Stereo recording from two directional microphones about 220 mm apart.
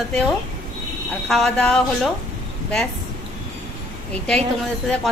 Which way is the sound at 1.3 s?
5° left (ahead or behind).